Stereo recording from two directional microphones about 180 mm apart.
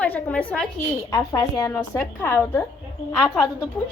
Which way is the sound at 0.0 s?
10° left (ahead or behind).